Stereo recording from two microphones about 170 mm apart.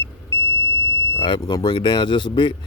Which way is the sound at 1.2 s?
25° left (ahead or behind).